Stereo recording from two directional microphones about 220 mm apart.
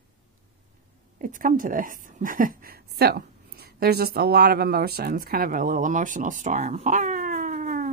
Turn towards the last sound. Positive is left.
turn(degrees=-35)  # may be behind; listen again after turning